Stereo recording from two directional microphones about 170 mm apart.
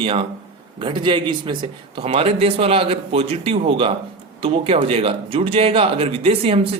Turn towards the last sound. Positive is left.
turn(degrees=-35)  # may be behind; listen again after turning